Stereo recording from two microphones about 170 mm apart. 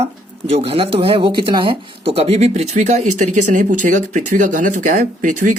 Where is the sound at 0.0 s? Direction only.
35° right (ahead or behind).